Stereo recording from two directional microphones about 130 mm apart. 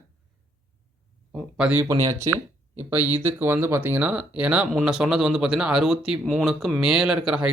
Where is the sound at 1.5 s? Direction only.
10° right (ahead or behind).